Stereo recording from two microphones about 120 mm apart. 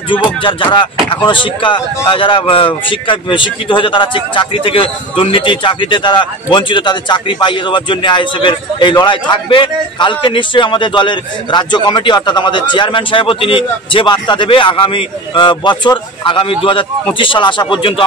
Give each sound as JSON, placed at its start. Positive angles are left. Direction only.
{"t": 0.4, "sound": "speech", "side_deg": 45}